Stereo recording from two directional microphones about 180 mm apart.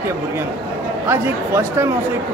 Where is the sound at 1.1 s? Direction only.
15° right (ahead or behind).